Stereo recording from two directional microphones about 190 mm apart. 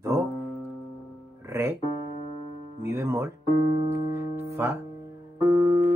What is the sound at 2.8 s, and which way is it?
Speech, 10° right (ahead or behind).